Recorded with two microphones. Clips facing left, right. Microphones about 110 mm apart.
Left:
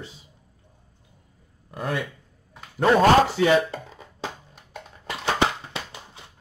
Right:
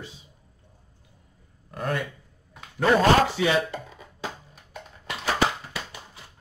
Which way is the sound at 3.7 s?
30° left (ahead or behind).